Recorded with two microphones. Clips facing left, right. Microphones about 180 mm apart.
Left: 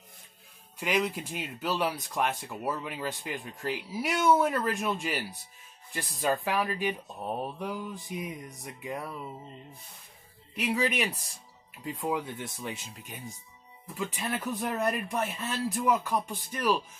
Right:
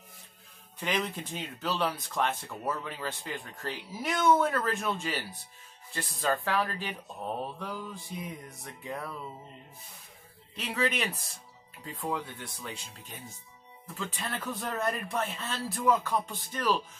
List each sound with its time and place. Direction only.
0.7 s speech: 10° left (ahead or behind)
10.5 s speech: 10° left (ahead or behind)